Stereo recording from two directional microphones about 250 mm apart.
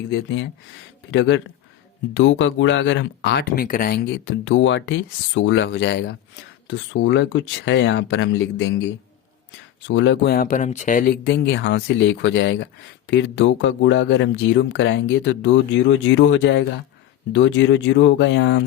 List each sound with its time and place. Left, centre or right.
0.1 s speech: left